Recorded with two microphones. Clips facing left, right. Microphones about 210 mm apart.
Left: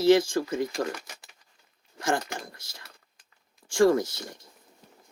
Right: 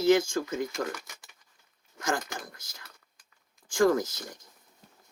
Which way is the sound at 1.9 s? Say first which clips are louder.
Left 3 dB; 30° left (ahead or behind).